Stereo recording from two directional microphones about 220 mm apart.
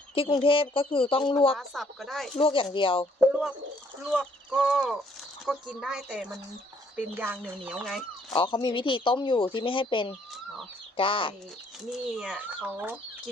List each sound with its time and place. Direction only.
0.1 s speech: 25° left (ahead or behind)
1.5 s speech: centre (ahead or behind)
2.4 s speech: 25° left (ahead or behind)
3.2 s speech: 5° right (ahead or behind)
8.3 s speech: 20° left (ahead or behind)
11.9 s speech: 5° right (ahead or behind)